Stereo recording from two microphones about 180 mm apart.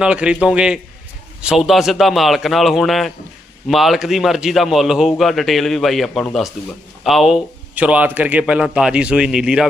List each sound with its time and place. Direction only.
0.0 s a man's voice: 5° right (ahead or behind)